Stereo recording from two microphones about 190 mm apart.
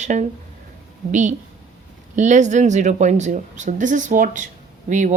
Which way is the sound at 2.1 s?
40° right (ahead or behind).